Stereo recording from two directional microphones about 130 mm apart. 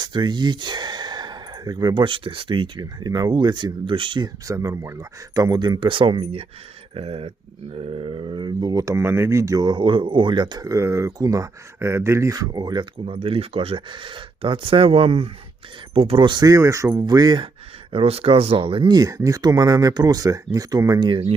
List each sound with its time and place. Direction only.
0.0 s speech: 35° right (ahead or behind)
4.4 s speech: 25° right (ahead or behind)
13.1 s speech: 45° right (ahead or behind)
17.9 s speech: 50° right (ahead or behind); by 21.2 s 30° right (ahead or behind)